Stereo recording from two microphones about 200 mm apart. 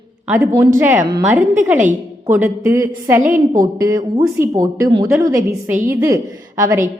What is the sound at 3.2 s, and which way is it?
Speech, 40° right (ahead or behind).